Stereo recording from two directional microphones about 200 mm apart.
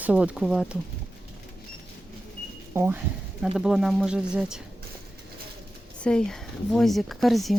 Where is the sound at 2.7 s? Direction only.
10° right (ahead or behind).